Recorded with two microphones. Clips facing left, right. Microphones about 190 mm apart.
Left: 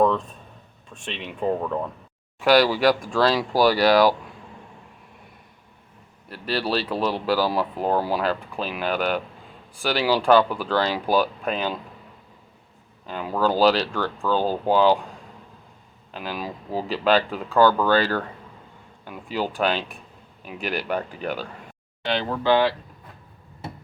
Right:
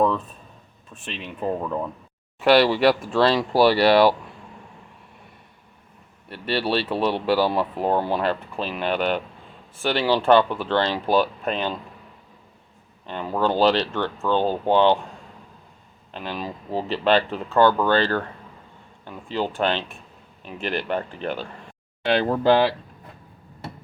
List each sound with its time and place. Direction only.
0.0 s speech: 5° right (ahead or behind)
6.2 s speech: centre (ahead or behind)
13.1 s speech: 5° left (ahead or behind)
16.1 s speech: 5° left (ahead or behind)
22.0 s speech: 60° right (ahead or behind)